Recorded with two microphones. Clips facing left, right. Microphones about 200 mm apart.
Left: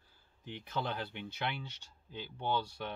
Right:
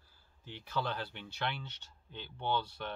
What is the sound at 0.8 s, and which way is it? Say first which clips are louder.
Speech: right 1 dB; 20° left (ahead or behind).